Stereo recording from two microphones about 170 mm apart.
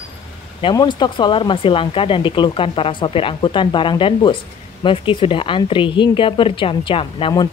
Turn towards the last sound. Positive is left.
turn(degrees=30)  # may be behind; listen again after turning